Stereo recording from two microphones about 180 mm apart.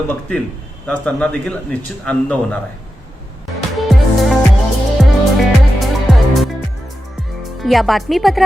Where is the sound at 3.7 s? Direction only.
Centre (ahead or behind).